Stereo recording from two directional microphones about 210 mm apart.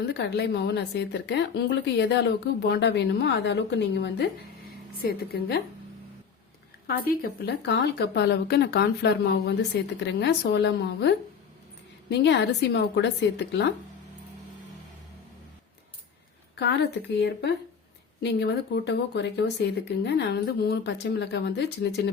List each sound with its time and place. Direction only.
0.0 s speech: 55° left (ahead or behind)
6.8 s a woman's voice: 45° left (ahead or behind)
17.2 s speech: 55° left (ahead or behind)